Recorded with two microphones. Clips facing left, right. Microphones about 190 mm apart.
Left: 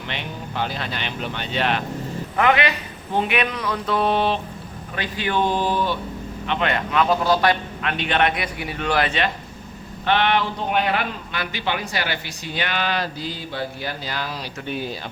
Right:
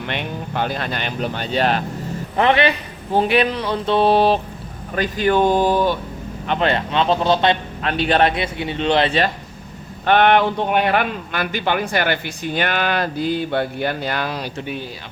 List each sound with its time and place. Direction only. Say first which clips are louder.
0.1 s a man's voice: right 4 dB; 50° right (ahead or behind)
2.3 s a sound: right 3 dB; 30° right (ahead or behind)
4.9 s a man's voice: right 6 dB; 45° right (ahead or behind)
6.5 s a man's voice: right 3 dB; 30° right (ahead or behind)
10.1 s a man's voice: right 6 dB; 50° right (ahead or behind)